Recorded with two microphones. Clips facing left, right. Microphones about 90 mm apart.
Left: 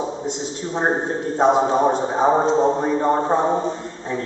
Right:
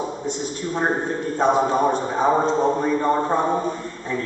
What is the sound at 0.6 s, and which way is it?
A man's voice, 25° left (ahead or behind).